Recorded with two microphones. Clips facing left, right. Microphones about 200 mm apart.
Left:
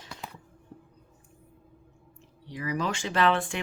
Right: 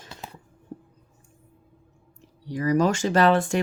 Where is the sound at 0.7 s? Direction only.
45° right (ahead or behind).